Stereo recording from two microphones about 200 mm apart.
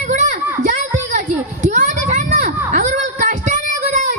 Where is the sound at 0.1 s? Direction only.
35° right (ahead or behind).